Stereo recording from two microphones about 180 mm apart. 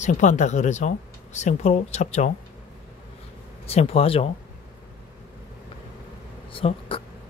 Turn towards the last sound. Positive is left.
turn(degrees=30)  # may be behind; listen again after turning